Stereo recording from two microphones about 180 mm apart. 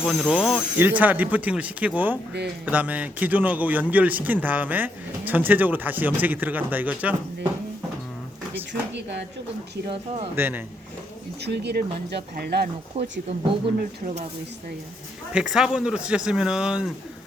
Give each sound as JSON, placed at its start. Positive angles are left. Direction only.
{"t": 0.0, "sound": "speech", "side_deg": 0}
{"t": 8.7, "sound": "speech", "side_deg": -70}
{"t": 10.3, "sound": "speech", "side_deg": -10}
{"t": 11.4, "sound": "speech", "side_deg": -70}
{"t": 12.9, "sound": "speech", "side_deg": -35}
{"t": 15.3, "sound": "speech", "side_deg": -5}